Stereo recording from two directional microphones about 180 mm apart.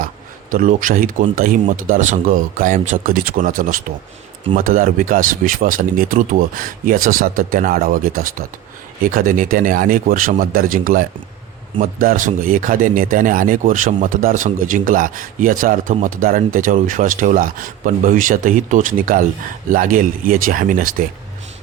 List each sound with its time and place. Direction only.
0.5 s speech: 45° right (ahead or behind)